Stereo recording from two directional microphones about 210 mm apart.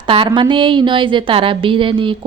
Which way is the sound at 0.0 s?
25° right (ahead or behind).